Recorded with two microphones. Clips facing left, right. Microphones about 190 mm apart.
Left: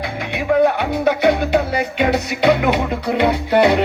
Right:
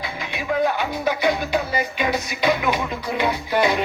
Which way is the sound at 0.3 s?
65° left (ahead or behind).